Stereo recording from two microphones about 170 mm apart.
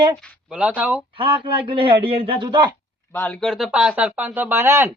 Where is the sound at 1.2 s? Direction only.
30° right (ahead or behind).